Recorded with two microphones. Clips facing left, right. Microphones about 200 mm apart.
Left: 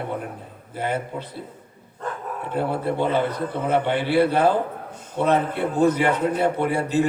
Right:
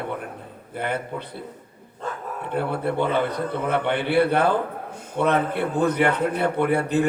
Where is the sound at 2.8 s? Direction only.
60° right (ahead or behind).